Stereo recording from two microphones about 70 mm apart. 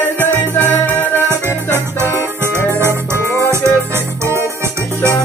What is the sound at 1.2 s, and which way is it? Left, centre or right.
Music, right.